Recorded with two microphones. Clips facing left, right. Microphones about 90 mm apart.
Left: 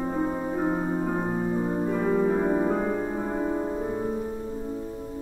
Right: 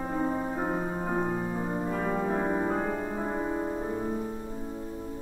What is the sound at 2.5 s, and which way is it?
Music, 20° right (ahead or behind).